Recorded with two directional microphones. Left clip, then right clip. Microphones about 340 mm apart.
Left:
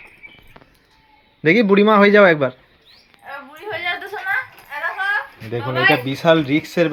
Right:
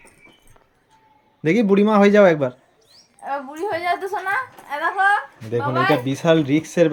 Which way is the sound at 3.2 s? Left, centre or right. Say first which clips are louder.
Right 6 dB; right.